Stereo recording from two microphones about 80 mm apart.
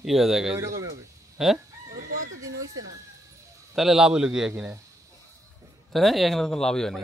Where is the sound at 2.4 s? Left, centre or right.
Right.